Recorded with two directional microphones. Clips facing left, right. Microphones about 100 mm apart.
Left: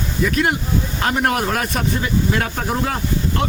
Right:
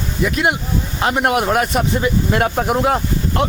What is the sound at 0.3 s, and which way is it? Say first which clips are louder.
Speech: right 1 dB; 15° right (ahead or behind).